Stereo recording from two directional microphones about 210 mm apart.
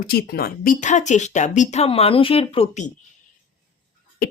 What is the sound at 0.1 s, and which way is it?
Speech, 45° left (ahead or behind).